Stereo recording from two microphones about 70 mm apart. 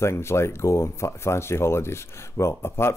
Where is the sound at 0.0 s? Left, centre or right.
Left.